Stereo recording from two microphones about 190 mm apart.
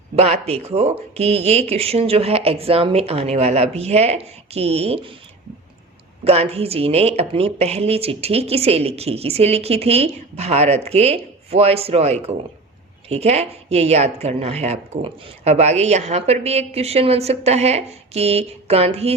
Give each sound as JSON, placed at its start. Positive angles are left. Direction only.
{"t": 0.2, "sound": "speech", "side_deg": -35}
{"t": 6.2, "sound": "speech", "side_deg": -30}